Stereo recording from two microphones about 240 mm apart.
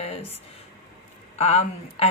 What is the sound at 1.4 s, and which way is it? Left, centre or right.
Speech, left.